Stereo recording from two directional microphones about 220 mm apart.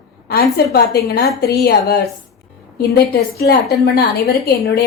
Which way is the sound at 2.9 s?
45° left (ahead or behind).